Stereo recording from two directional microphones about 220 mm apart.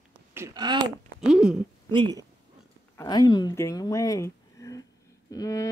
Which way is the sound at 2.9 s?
20° left (ahead or behind).